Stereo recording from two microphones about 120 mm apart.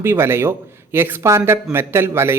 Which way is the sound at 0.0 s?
20° right (ahead or behind).